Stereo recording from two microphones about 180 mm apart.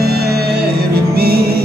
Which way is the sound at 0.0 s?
60° right (ahead or behind).